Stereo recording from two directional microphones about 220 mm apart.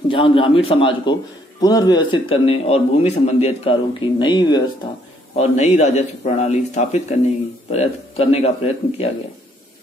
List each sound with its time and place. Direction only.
0.1 s speech: 25° left (ahead or behind)
5.3 s a man's voice: 30° left (ahead or behind)